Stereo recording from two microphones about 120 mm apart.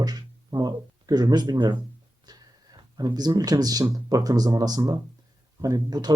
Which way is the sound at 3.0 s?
35° right (ahead or behind).